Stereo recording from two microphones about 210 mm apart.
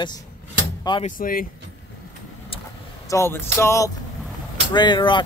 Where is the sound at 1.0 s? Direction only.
40° left (ahead or behind).